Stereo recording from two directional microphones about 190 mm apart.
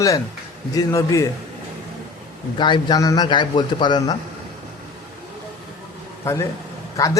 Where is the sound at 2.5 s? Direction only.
25° left (ahead or behind).